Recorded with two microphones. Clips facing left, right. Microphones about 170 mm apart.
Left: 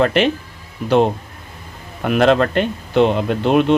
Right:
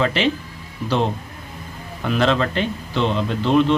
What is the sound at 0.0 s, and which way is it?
Speech, 55° left (ahead or behind).